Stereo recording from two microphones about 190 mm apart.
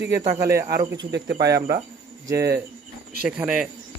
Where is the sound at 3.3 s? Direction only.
5° right (ahead or behind).